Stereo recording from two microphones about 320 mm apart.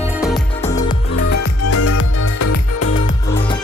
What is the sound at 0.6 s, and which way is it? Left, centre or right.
Music, centre.